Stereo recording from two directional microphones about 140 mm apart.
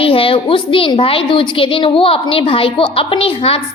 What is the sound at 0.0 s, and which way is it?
A woman's voice, 40° left (ahead or behind).